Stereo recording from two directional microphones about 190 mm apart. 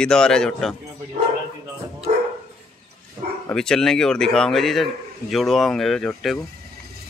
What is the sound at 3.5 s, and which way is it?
A man's voice, 5° left (ahead or behind).